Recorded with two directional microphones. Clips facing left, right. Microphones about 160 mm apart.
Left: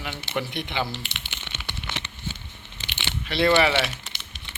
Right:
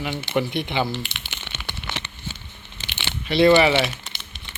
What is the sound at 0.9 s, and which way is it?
Crumpling, 45° right (ahead or behind).